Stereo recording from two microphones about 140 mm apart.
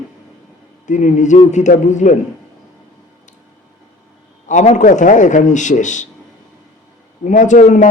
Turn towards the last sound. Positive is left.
turn(degrees=60)  # may be behind; listen again after turning